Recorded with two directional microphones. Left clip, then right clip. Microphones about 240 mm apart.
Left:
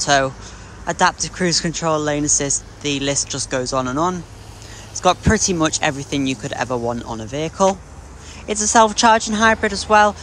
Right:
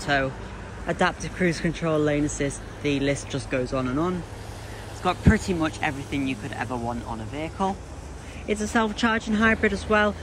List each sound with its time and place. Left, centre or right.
0.0 s speech: centre
6.7 s speech: right
8.5 s speech: centre